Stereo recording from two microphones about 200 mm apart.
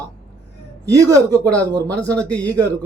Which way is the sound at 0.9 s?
15° right (ahead or behind).